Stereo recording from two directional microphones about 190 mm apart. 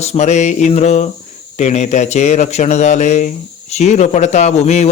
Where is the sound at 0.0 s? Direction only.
35° left (ahead or behind).